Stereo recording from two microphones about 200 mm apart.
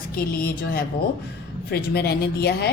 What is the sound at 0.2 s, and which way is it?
A woman's voice, 50° left (ahead or behind).